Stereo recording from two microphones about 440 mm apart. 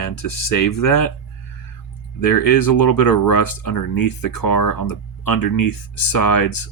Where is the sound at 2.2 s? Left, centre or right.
Left.